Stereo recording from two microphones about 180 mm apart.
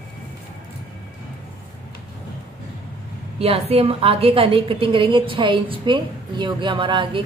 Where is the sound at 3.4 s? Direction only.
35° right (ahead or behind).